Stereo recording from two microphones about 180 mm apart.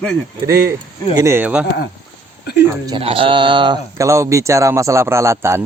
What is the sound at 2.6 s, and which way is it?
Speech, 20° right (ahead or behind).